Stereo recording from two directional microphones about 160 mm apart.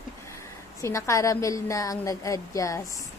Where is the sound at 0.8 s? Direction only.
20° left (ahead or behind).